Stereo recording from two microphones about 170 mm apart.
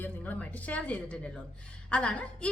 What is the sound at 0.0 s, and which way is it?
A woman's voice, 10° left (ahead or behind).